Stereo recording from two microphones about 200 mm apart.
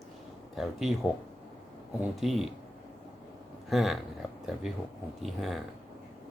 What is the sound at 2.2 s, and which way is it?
Speech, centre (ahead or behind).